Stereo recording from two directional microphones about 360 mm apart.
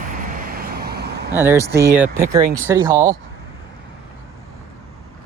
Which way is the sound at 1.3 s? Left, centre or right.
Centre.